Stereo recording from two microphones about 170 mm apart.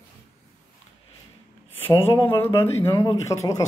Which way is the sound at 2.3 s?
15° left (ahead or behind).